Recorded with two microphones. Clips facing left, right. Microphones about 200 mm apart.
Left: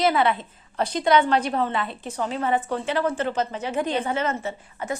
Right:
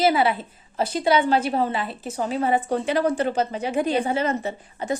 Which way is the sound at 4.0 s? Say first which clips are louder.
Right 2 dB; 35° right (ahead or behind).